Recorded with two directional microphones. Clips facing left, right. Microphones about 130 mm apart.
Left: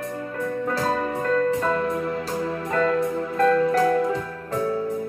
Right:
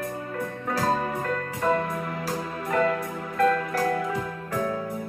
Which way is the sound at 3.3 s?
30° left (ahead or behind).